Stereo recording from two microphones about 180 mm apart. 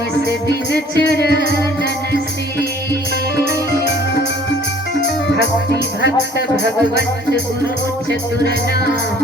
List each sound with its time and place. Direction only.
0.4 s music: 70° left (ahead or behind)